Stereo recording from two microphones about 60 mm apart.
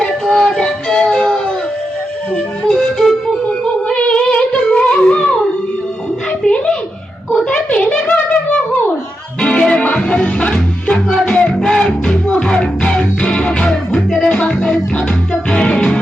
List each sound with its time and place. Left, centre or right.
0.0 s music: centre
6.4 s a sound: centre
9.4 s music: centre
10.9 s music: centre
11.3 s music: centre
15.4 s music: centre